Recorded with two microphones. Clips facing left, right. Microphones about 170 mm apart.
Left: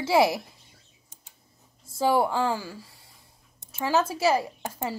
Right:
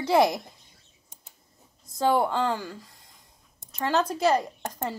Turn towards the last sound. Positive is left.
turn(degrees=5)  # may be behind; listen again after turning